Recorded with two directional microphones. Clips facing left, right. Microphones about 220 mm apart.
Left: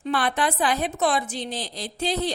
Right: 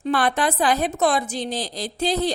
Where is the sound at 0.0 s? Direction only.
40° right (ahead or behind).